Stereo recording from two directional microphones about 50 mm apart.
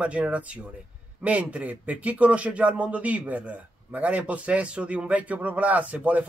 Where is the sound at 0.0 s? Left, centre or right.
Right.